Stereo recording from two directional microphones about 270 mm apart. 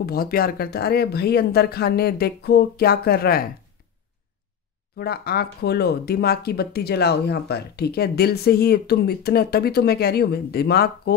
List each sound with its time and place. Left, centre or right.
0.0 s speech: left
4.9 s speech: left